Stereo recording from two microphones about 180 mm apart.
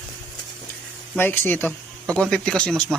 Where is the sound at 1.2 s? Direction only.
10° left (ahead or behind).